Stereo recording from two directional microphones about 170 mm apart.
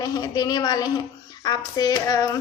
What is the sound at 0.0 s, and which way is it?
Speech, 20° left (ahead or behind).